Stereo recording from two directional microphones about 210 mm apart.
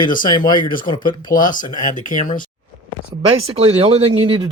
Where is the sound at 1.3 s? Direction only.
40° left (ahead or behind).